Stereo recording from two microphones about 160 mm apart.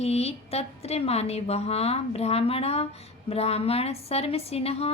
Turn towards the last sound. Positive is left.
turn(degrees=40)  # may be behind; listen again after turning